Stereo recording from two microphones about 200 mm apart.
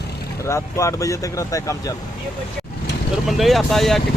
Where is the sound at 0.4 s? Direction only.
15° left (ahead or behind).